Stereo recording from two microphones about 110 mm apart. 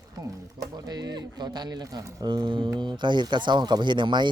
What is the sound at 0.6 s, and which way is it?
Speech, 35° right (ahead or behind).